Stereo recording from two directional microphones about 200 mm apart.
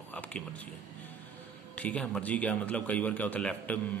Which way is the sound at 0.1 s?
5° left (ahead or behind).